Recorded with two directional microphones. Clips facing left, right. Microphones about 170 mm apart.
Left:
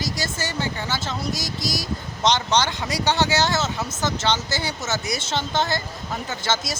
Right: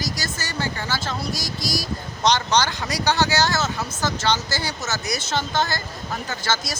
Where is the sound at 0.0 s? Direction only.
25° left (ahead or behind).